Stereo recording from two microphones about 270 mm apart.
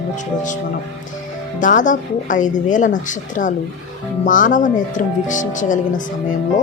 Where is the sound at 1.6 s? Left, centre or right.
Left.